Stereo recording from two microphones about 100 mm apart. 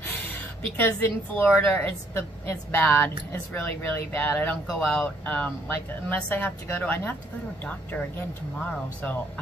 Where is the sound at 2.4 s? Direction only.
20° left (ahead or behind).